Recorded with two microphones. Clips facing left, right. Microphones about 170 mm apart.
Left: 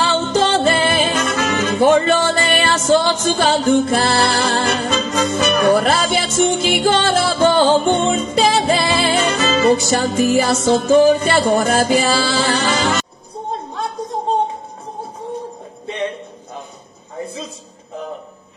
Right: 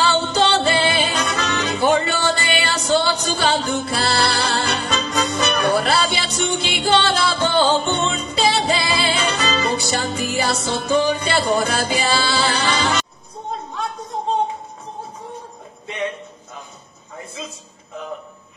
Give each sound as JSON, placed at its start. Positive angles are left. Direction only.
{"t": 0.0, "sound": "music", "side_deg": 45}